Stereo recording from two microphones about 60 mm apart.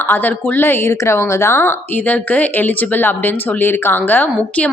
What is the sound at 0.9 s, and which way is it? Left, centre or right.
A woman's voice, left.